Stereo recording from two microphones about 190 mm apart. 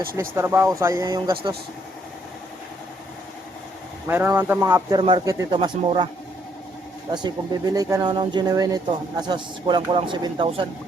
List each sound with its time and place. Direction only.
0.2 s speech: 15° right (ahead or behind)
4.0 s speech: 10° right (ahead or behind)
7.1 s speech: 20° right (ahead or behind)